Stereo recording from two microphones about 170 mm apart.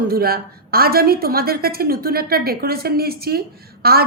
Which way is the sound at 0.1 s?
65° right (ahead or behind).